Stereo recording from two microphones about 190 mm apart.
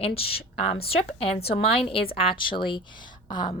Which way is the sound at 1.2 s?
30° left (ahead or behind).